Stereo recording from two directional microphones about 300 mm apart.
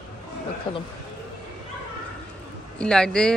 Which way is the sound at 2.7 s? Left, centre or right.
Centre.